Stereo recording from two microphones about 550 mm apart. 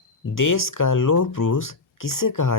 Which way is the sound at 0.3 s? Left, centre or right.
Left.